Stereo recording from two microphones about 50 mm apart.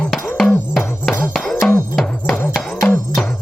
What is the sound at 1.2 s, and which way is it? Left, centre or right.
Music, centre.